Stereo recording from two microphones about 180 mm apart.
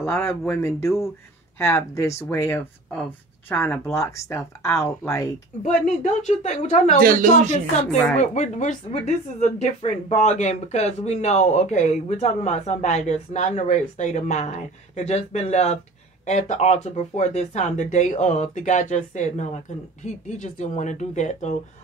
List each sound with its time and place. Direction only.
0.0 s speech: 15° left (ahead or behind)
5.6 s speech: 40° left (ahead or behind)
7.0 s speech: 50° right (ahead or behind)
8.2 s speech: 40° left (ahead or behind)